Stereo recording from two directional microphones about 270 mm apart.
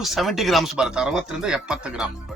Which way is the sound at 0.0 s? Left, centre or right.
Centre.